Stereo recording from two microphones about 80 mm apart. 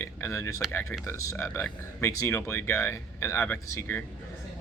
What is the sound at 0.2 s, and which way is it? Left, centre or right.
Speech, left.